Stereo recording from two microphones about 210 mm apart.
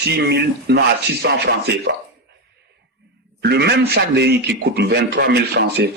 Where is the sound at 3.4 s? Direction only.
50° right (ahead or behind).